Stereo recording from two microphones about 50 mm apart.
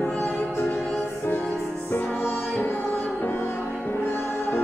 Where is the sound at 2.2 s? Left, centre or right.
Left.